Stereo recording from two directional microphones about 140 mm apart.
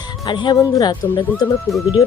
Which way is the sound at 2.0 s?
25° left (ahead or behind).